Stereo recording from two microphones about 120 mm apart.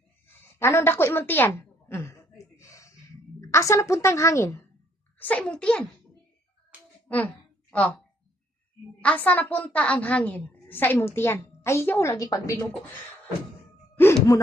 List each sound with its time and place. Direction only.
0.3 s a sound: 20° left (ahead or behind)
3.4 s a woman's voice: 25° left (ahead or behind)
5.2 s a woman's voice: 10° left (ahead or behind)
7.1 s a sound: 15° left (ahead or behind)
9.0 s a woman's voice: 10° left (ahead or behind); by 12.5 s 30° left (ahead or behind)
14.3 s a woman's voice: 25° left (ahead or behind)